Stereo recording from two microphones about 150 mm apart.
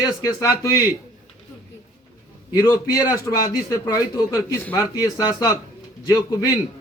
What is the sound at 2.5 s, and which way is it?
A man's voice, 25° left (ahead or behind).